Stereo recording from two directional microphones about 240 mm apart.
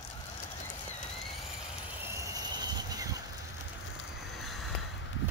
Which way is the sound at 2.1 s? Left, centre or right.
Centre.